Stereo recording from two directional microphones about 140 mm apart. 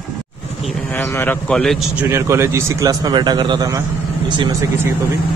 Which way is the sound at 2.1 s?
20° right (ahead or behind).